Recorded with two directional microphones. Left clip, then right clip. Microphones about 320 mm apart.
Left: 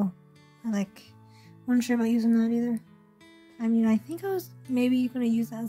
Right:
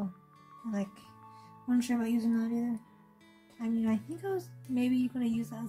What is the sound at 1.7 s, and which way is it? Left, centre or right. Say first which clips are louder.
Speech: left 5 dB; left.